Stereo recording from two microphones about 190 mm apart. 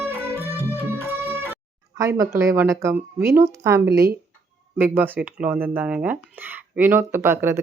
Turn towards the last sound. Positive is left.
turn(degrees=-10)  # may be behind; listen again after turning